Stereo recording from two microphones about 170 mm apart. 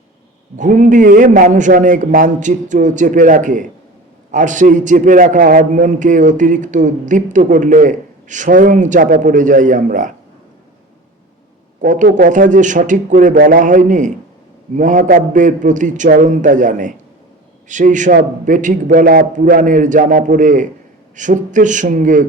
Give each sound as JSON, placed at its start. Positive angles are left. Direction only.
{"t": 0.5, "sound": "a man's voice", "side_deg": -50}
{"t": 11.8, "sound": "a man's voice", "side_deg": -50}